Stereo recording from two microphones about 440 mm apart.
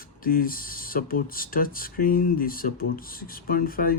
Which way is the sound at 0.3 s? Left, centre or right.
Centre.